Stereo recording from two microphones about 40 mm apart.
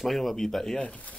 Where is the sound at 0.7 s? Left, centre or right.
Left.